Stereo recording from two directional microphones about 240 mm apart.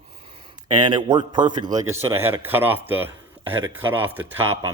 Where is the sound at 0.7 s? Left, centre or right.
Centre.